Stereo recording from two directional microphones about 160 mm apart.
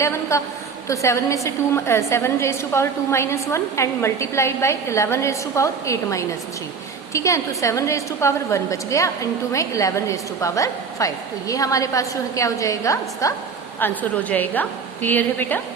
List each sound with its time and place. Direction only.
0.0 s a woman's voice: 20° left (ahead or behind)